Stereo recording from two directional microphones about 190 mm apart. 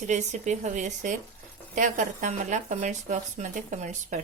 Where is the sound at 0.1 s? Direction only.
40° right (ahead or behind).